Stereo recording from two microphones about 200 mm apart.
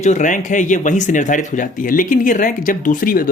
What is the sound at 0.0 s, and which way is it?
Speech, 40° left (ahead or behind).